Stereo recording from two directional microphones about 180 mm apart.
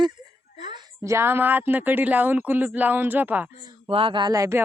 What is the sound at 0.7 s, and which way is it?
A woman's voice, 20° right (ahead or behind).